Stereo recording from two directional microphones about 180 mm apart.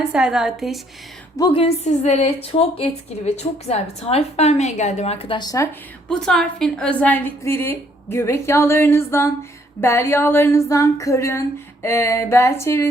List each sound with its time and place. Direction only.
0.0 s a woman's voice: 5° right (ahead or behind)
1.4 s a woman's voice: 30° left (ahead or behind)
6.1 s a woman's voice: 5° left (ahead or behind)